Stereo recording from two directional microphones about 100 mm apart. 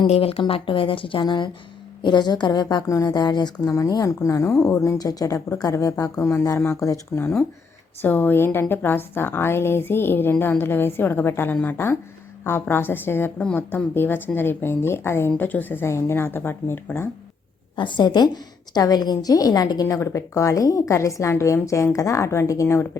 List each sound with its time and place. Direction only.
0.1 s a woman's voice: 75° left (ahead or behind); by 10.3 s 20° left (ahead or behind)
10.3 s a woman's voice: 10° left (ahead or behind)
10.6 s a woman's voice: 20° left (ahead or behind)
17.7 s a woman's voice: 50° left (ahead or behind); by 22.9 s 25° left (ahead or behind)